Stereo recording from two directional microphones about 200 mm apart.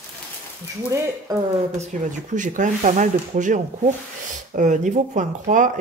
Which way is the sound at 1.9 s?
40° right (ahead or behind).